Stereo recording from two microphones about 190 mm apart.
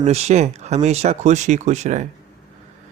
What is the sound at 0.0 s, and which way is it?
Speech, 35° right (ahead or behind).